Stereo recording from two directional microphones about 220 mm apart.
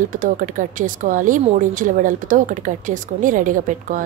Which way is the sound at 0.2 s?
35° right (ahead or behind).